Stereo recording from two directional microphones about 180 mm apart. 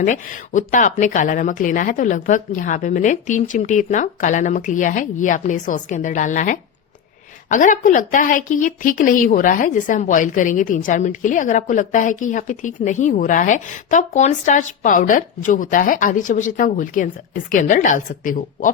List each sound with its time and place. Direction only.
0.0 s a woman's voice: 45° left (ahead or behind)